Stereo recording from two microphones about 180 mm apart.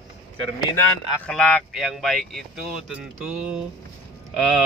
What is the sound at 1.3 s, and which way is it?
Speech, 5° left (ahead or behind).